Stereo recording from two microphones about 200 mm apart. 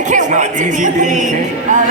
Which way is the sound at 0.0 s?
40° right (ahead or behind).